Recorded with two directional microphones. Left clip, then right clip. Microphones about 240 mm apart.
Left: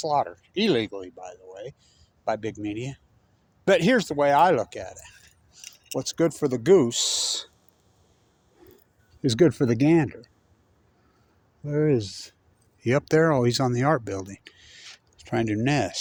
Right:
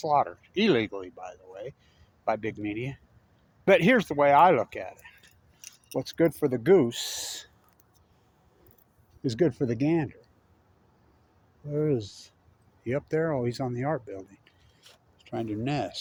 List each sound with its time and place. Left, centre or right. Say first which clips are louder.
0.0 s speech: even; centre
8.6 s a sound: left 12 dB; left
9.2 s speech: left 6 dB; left
11.6 s speech: left 5 dB; left
15.6 s speech: left 6 dB; left